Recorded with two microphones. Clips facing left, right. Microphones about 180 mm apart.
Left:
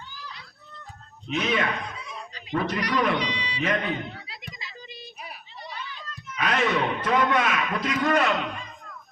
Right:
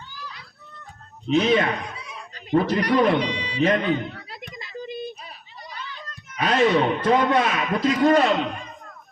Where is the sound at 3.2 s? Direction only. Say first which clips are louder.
Right 5 dB; 50° right (ahead or behind).